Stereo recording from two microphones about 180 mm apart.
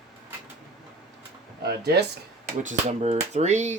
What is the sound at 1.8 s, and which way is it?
Speech, 65° right (ahead or behind).